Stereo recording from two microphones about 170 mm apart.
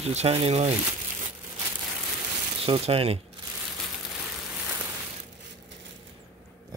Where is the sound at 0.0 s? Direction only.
40° right (ahead or behind).